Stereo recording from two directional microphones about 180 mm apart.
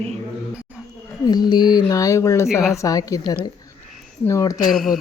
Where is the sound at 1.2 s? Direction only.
25° left (ahead or behind).